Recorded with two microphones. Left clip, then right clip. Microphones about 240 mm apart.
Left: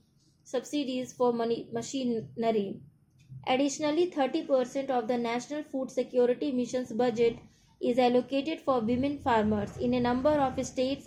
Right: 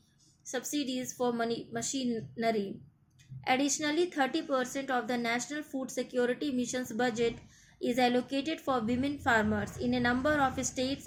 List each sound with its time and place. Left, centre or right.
0.4 s a woman's voice: right